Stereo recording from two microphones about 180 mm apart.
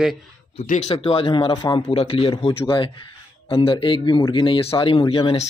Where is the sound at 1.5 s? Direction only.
20° left (ahead or behind).